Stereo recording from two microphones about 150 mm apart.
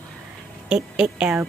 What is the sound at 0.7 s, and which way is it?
Speech, 5° right (ahead or behind).